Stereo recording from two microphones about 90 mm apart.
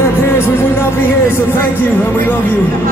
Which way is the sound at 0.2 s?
30° left (ahead or behind).